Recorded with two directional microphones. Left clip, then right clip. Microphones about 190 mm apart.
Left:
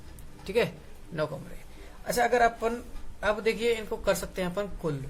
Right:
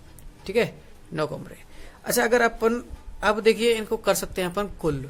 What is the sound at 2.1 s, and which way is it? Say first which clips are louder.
Speech: right 3 dB; 55° right (ahead or behind).